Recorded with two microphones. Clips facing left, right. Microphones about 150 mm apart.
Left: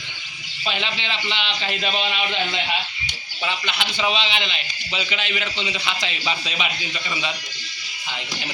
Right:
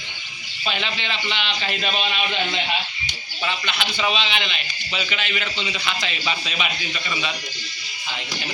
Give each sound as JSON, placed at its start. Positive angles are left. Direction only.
{"t": 0.7, "sound": "a man's voice", "side_deg": 20}
{"t": 2.3, "sound": "speech", "side_deg": 0}
{"t": 3.4, "sound": "a man's voice", "side_deg": 15}